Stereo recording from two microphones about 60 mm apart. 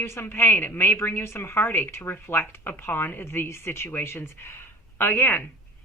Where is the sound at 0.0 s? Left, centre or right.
Left.